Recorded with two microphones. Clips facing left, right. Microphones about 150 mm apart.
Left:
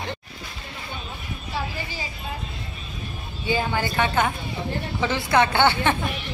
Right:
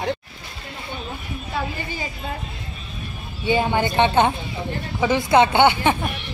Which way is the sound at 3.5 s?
20° right (ahead or behind).